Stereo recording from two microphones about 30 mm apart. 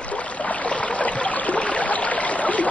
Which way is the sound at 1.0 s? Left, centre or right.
Left.